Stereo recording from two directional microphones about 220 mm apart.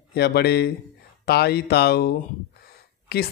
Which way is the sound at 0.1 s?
45° left (ahead or behind).